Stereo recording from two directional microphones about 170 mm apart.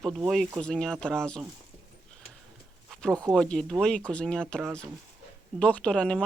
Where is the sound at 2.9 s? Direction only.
5° left (ahead or behind).